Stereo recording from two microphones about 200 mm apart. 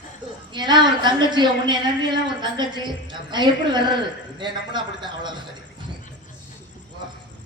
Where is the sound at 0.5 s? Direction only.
20° right (ahead or behind).